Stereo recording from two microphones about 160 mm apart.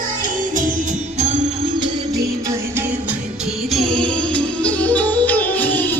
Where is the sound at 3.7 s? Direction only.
5° left (ahead or behind).